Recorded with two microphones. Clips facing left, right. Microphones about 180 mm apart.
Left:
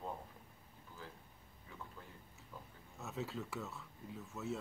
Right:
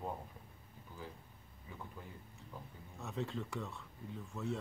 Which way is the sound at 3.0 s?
5° left (ahead or behind).